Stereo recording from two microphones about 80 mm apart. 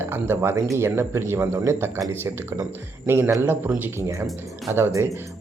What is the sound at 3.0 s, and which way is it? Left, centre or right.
Speech, right.